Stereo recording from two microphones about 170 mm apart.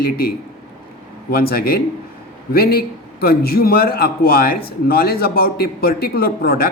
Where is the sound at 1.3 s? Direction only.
60° left (ahead or behind).